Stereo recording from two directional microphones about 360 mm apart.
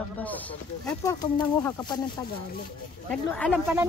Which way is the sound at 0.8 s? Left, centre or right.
Centre.